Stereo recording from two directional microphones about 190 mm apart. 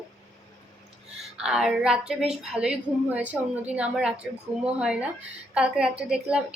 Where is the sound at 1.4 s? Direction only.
5° right (ahead or behind).